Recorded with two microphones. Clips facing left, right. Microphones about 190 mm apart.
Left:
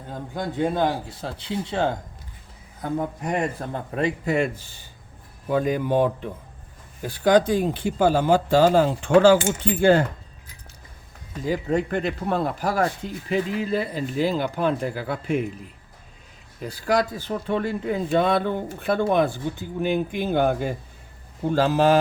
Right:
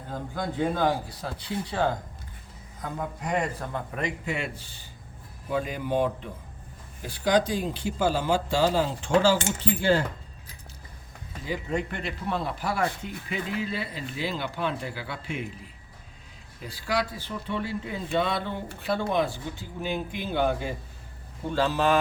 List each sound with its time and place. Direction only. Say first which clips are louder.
0.3 s speech: left 4 dB; 20° left (ahead or behind)
3.9 s speech: left 11 dB; 35° left (ahead or behind)
5.5 s speech: left 6 dB; 50° left (ahead or behind)
11.4 s speech: left 6 dB; 40° left (ahead or behind)
16.6 s speech: left 6 dB; 45° left (ahead or behind)